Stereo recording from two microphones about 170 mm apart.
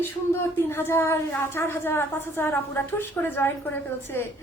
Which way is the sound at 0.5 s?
15° left (ahead or behind).